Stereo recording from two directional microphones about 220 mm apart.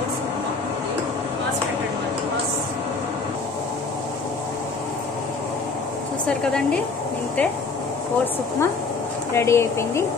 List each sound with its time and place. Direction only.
6.2 s a woman's voice: 5° left (ahead or behind)
9.3 s speech: 10° left (ahead or behind)